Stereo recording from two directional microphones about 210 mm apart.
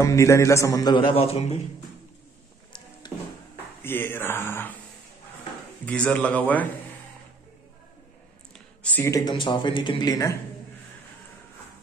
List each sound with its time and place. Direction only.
0.0 s speech: 15° left (ahead or behind); by 1.6 s 30° left (ahead or behind)
3.0 s music: 20° left (ahead or behind)
3.8 s speech: 10° left (ahead or behind)
5.9 s speech: 5° left (ahead or behind)
8.5 s speech: 5° left (ahead or behind)